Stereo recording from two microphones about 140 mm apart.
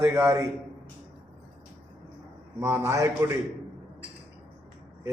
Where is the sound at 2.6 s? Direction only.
20° right (ahead or behind).